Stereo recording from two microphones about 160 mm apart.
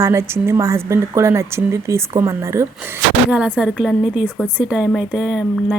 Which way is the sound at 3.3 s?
10° right (ahead or behind).